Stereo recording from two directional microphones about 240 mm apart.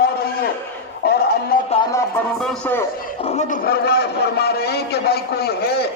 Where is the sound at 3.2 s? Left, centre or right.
Left.